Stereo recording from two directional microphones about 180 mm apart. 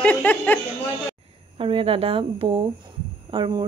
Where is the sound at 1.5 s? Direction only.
30° right (ahead or behind).